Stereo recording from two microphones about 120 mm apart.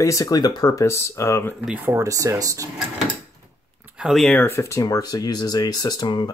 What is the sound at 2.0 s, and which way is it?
Speech, 25° right (ahead or behind).